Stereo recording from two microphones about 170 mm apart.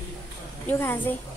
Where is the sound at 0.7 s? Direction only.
10° left (ahead or behind).